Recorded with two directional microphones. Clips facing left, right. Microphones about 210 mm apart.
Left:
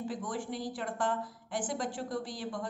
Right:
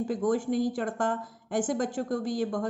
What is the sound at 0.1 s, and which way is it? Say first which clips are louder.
A woman's voice: right 10 dB; 45° right (ahead or behind).